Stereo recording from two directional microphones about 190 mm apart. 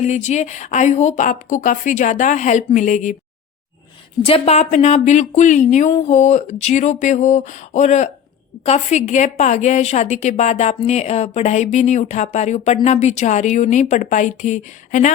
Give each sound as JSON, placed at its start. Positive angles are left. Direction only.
{"t": 0.0, "sound": "a woman's voice", "side_deg": 40}
{"t": 4.2, "sound": "a woman's voice", "side_deg": 30}